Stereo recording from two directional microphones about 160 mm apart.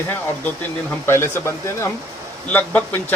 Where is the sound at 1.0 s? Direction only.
15° left (ahead or behind).